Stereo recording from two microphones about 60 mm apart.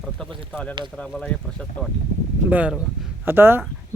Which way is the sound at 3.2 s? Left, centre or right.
Right.